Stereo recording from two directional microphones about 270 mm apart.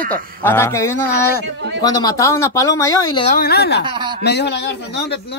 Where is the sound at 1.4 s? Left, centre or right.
Right.